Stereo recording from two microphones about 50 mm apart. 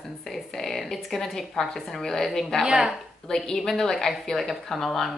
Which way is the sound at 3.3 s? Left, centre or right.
Centre.